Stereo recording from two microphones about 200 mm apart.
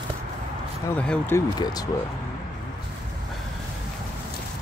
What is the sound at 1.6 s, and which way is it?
Speech, 20° left (ahead or behind).